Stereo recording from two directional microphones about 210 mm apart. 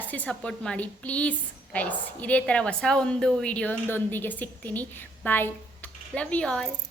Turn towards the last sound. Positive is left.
turn(degrees=5)  # may be behind; listen again after turning